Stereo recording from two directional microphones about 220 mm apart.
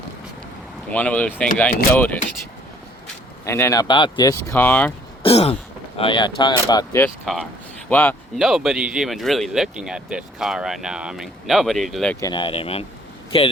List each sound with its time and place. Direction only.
0.9 s speech: 5° left (ahead or behind)
3.4 s speech: 10° left (ahead or behind)
5.2 s throat clearing: 25° left (ahead or behind)
6.0 s speech: 20° left (ahead or behind)
8.4 s speech: centre (ahead or behind)
12.2 s speech: 20° left (ahead or behind)